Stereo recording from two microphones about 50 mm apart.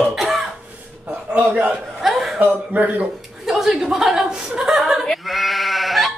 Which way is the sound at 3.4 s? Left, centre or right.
Centre.